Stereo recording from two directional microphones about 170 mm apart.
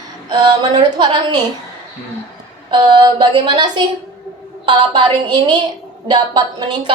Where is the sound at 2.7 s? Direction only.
25° right (ahead or behind).